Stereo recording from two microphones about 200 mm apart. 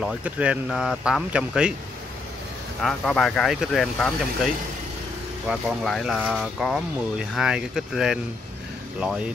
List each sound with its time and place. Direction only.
0.0 s speech: 5° right (ahead or behind)
2.8 s speech: centre (ahead or behind)
5.5 s speech: centre (ahead or behind)